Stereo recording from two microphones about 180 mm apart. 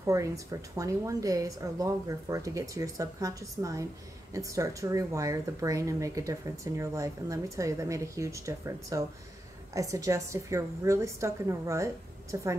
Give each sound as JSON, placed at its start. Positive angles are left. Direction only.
{"t": 0.0, "sound": "a woman's voice", "side_deg": -15}